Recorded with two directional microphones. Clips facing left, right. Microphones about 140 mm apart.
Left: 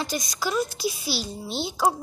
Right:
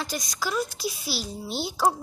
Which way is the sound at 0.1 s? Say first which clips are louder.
Left 2 dB; 5° left (ahead or behind).